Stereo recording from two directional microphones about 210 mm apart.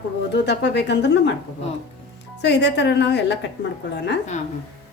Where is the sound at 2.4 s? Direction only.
55° left (ahead or behind).